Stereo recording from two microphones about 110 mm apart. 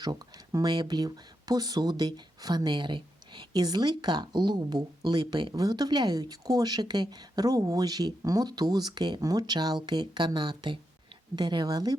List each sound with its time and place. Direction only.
0.0 s speech: 40° right (ahead or behind)